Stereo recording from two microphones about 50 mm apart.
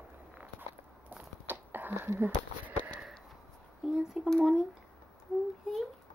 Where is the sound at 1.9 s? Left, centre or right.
Right.